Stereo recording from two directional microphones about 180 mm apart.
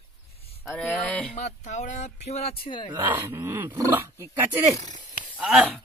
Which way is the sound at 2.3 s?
35° left (ahead or behind).